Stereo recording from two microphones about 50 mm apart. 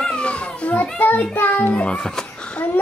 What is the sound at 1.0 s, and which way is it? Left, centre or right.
Music, left.